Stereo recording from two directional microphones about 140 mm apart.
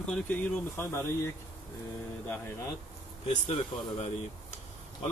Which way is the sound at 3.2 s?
45° left (ahead or behind).